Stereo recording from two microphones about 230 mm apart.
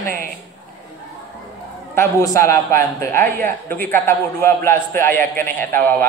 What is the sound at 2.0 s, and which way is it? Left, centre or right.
A man's voice, centre.